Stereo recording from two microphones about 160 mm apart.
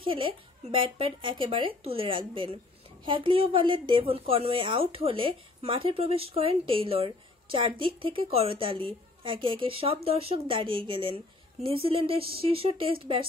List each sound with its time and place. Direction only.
0.0 s a woman's voice: 30° right (ahead or behind)